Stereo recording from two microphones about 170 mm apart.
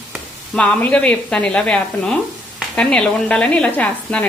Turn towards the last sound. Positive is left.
turn(degrees=10)  # may be behind; listen again after turning